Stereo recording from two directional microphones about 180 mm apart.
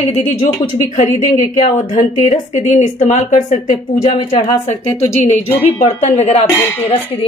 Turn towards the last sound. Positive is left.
turn(degrees=10)  # may be behind; listen again after turning